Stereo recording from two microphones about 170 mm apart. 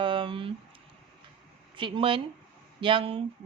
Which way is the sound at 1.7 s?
30° right (ahead or behind).